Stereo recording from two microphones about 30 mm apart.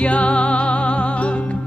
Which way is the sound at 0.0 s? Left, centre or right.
Left.